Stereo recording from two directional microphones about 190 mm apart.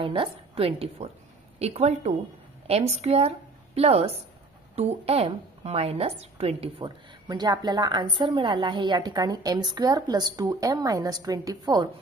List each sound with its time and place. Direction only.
0.0 s a woman's voice: 30° right (ahead or behind)